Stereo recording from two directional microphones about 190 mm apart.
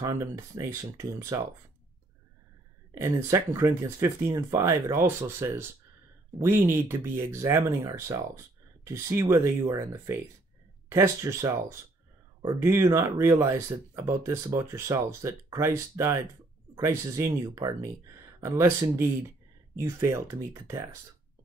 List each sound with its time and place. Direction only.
0.0 s speech: 15° right (ahead or behind)
2.9 s speech: 15° right (ahead or behind)